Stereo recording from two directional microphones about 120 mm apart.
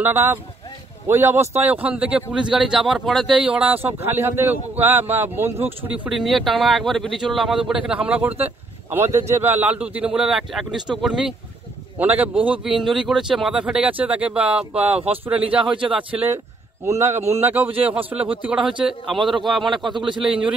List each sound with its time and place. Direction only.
0.0 s a man's voice: 20° right (ahead or behind)
6.0 s a man's voice: centre (ahead or behind)
17.3 s a man's voice: 20° right (ahead or behind); by 19.9 s centre (ahead or behind)
19.9 s a man's voice: 40° right (ahead or behind)
20.2 s a man's voice: 10° right (ahead or behind)